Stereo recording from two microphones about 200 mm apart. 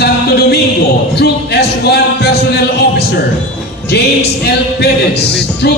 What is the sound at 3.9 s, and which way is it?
Speech, 55° left (ahead or behind).